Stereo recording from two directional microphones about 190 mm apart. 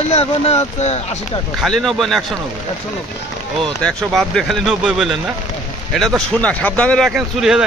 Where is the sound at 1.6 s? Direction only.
Centre (ahead or behind).